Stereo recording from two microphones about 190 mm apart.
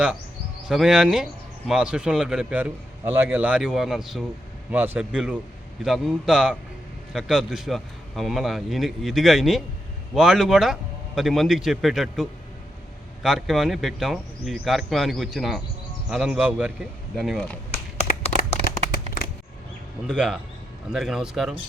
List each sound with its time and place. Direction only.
0.7 s a man's voice: 5° right (ahead or behind)
18.2 s a sound: 35° left (ahead or behind)
20.1 s speech: 5° right (ahead or behind)